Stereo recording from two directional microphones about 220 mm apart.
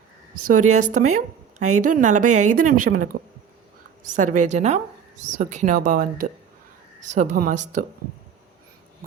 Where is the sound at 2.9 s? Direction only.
35° right (ahead or behind).